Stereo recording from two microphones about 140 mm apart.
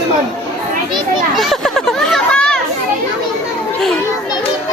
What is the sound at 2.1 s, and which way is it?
Children playing, 5° left (ahead or behind).